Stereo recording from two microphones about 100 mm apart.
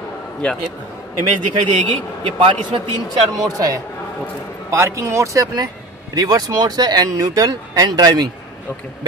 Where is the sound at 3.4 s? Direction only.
35° right (ahead or behind).